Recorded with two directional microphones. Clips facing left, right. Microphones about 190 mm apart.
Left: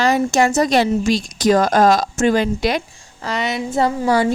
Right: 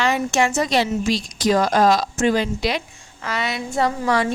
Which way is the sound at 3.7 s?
30° left (ahead or behind).